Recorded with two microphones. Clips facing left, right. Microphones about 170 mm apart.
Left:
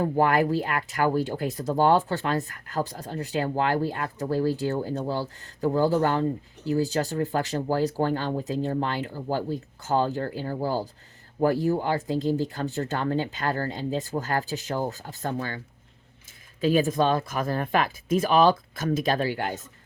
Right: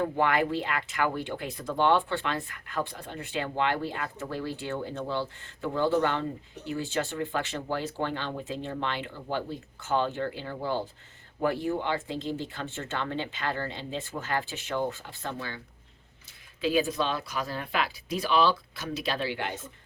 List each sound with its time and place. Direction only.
0.0 s speech: 40° left (ahead or behind)